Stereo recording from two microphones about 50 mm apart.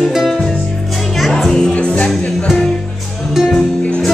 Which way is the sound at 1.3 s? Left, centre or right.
Centre.